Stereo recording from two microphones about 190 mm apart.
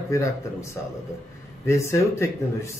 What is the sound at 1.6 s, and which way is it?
A man's voice, 15° left (ahead or behind).